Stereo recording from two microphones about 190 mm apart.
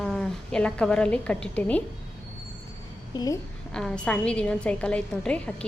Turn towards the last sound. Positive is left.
turn(degrees=5)  # may be behind; listen again after turning